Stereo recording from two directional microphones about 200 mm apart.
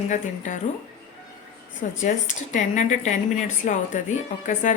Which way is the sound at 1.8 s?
35° left (ahead or behind).